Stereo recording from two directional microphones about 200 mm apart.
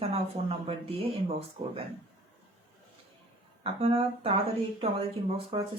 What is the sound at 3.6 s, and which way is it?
Speech, 25° right (ahead or behind).